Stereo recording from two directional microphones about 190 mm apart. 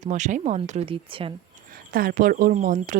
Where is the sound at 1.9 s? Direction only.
50° right (ahead or behind).